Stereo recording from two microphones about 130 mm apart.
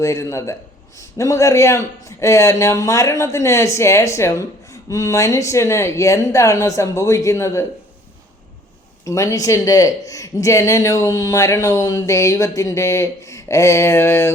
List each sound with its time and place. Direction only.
0.0 s a man's voice: 20° left (ahead or behind)
9.0 s a man's voice: 25° left (ahead or behind)